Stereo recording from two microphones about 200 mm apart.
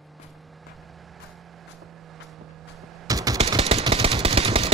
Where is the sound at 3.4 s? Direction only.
30° right (ahead or behind).